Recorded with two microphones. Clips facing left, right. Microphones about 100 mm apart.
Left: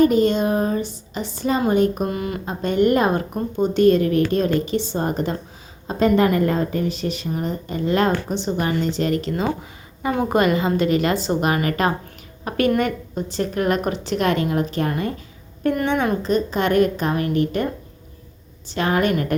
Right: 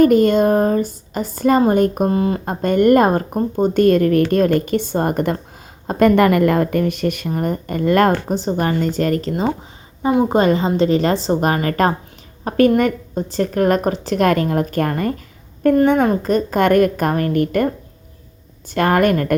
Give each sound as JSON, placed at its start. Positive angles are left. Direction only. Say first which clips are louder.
{"t": 0.0, "sound": "a woman's voice", "louder": "right 4 dB", "side_deg": -50}
{"t": 2.0, "sound": "a woman's voice", "louder": "right 7 dB", "side_deg": -30}
{"t": 2.4, "sound": "a woman's voice", "louder": "even", "side_deg": -50}
{"t": 10.1, "sound": "a woman's voice", "louder": "right 4 dB", "side_deg": -20}
{"t": 15.7, "sound": "a woman's voice", "louder": "right 7 dB", "side_deg": -35}
{"t": 18.7, "sound": "a woman's voice", "louder": "right 5 dB", "side_deg": -55}